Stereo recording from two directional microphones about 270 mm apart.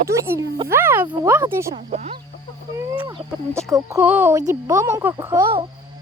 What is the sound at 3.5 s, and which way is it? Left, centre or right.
Speech, centre.